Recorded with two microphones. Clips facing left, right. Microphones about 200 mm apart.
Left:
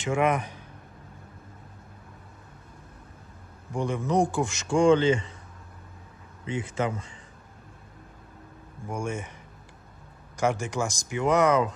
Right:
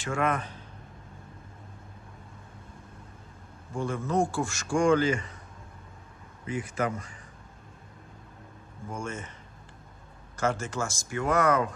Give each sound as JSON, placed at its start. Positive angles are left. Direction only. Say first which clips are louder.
{"t": 0.0, "sound": "a man's voice", "louder": "left 4 dB", "side_deg": 15}
{"t": 3.7, "sound": "a man's voice", "louder": "left 3 dB", "side_deg": 15}
{"t": 6.5, "sound": "a man's voice", "louder": "left 1 dB", "side_deg": 25}
{"t": 8.9, "sound": "speech", "louder": "left 4 dB", "side_deg": 10}
{"t": 10.3, "sound": "speech", "louder": "left 3 dB", "side_deg": 15}